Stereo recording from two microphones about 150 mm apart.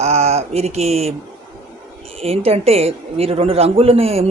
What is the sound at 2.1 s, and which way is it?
A woman's voice, 40° right (ahead or behind).